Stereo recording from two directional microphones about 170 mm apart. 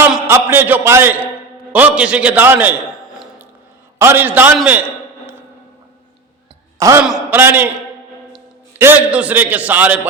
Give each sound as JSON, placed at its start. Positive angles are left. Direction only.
{"t": 0.3, "sound": "a man's voice", "side_deg": -15}
{"t": 3.9, "sound": "a man's voice", "side_deg": -15}
{"t": 6.7, "sound": "a man's voice", "side_deg": -20}
{"t": 7.0, "sound": "a man's voice", "side_deg": -5}
{"t": 8.8, "sound": "a man's voice", "side_deg": -10}